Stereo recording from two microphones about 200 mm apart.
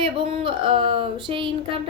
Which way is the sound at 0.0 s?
25° right (ahead or behind).